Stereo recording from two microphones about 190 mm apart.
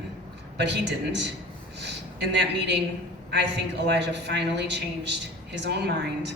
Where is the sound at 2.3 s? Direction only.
65° right (ahead or behind).